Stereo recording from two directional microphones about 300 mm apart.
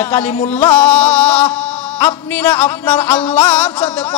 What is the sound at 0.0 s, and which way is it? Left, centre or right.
A man's voice, centre.